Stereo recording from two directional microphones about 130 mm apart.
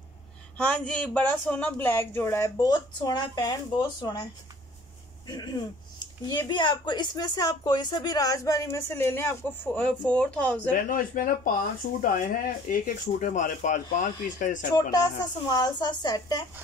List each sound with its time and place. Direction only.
0.6 s speech: 5° left (ahead or behind)
2.7 s a woman's voice: 35° left (ahead or behind); by 9.5 s 20° left (ahead or behind)
9.8 s speech: 10° left (ahead or behind)
10.7 s speech: 90° left
14.9 s speech: 30° left (ahead or behind)